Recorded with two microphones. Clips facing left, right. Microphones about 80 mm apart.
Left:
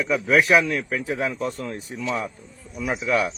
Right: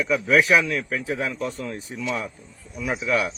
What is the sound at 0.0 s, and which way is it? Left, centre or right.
Speech, centre.